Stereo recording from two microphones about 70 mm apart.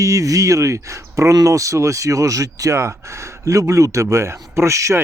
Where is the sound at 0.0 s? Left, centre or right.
Right.